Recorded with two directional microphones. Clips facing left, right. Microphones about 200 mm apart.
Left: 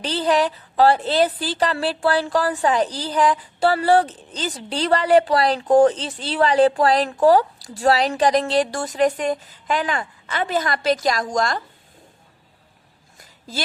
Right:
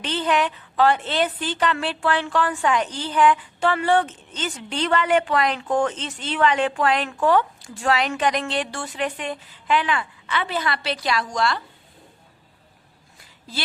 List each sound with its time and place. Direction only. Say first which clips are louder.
0.0 s a woman's voice: left 3 dB; 35° left (ahead or behind)